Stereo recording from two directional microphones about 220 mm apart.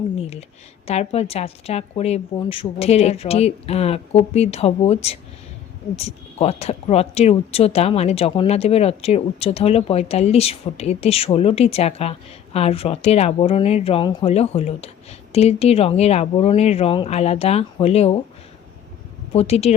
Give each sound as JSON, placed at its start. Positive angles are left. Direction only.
{"t": 0.2, "sound": "speech", "side_deg": 30}
{"t": 19.3, "sound": "speech", "side_deg": 30}